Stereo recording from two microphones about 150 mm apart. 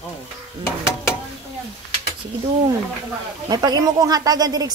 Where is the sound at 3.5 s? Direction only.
25° right (ahead or behind).